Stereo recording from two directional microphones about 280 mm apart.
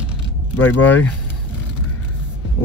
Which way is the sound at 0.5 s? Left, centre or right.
Centre.